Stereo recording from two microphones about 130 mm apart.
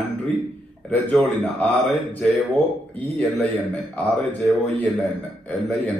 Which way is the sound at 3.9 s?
10° left (ahead or behind).